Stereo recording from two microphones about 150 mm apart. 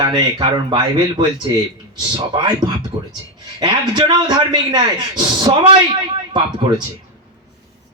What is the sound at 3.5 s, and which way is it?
A man's voice, 30° right (ahead or behind).